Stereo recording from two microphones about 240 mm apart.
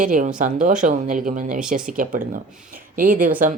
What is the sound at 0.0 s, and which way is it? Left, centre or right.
Speech, right.